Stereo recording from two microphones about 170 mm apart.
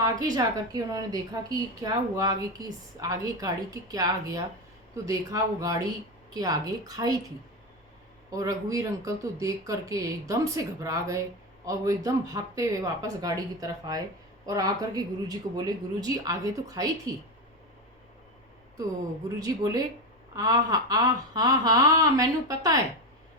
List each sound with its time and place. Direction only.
0.0 s a woman's voice: 20° right (ahead or behind)
8.3 s a woman's voice: 20° right (ahead or behind)
20.3 s a woman's voice: 20° right (ahead or behind)